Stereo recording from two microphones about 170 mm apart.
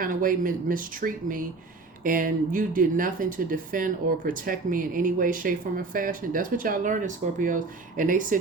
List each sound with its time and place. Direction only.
0.0 s speech: 55° right (ahead or behind)